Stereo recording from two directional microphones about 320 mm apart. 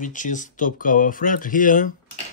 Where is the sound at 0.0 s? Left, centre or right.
Left.